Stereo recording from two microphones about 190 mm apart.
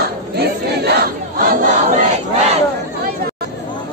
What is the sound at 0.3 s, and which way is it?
Battle cry, 55° right (ahead or behind).